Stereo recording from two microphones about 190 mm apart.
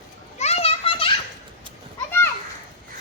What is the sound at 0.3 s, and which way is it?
Children playing, 35° left (ahead or behind).